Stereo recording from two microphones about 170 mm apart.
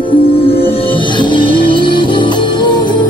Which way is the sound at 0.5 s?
35° left (ahead or behind).